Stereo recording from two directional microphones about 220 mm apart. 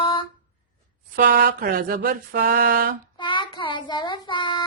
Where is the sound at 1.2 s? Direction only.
45° right (ahead or behind).